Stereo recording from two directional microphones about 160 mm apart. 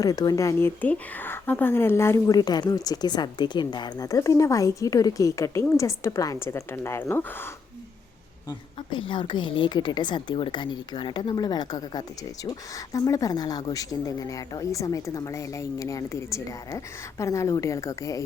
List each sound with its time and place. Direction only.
0.0 s speech: 25° left (ahead or behind)
8.4 s speech: 30° left (ahead or behind)